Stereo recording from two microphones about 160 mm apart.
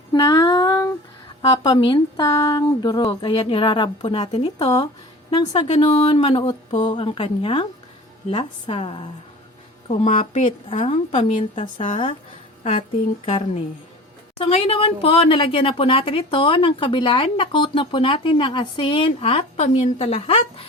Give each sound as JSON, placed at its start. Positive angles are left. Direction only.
{"t": 0.1, "sound": "a sound", "side_deg": 25}
{"t": 1.4, "sound": "a woman's voice", "side_deg": 35}
{"t": 5.6, "sound": "speech", "side_deg": 45}
{"t": 13.2, "sound": "speech", "side_deg": 40}